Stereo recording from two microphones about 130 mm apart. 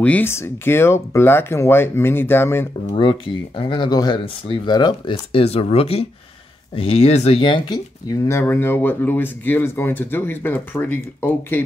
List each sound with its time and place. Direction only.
0.0 s speech: 15° left (ahead or behind)
2.9 s speech: 40° left (ahead or behind)
5.1 s speech: 50° left (ahead or behind); by 11.6 s 15° left (ahead or behind)